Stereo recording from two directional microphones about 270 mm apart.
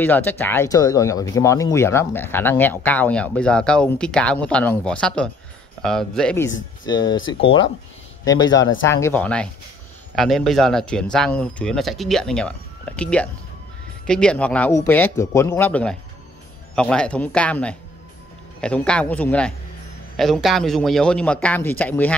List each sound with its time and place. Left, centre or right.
0.0 s speech: centre
6.9 s speech: centre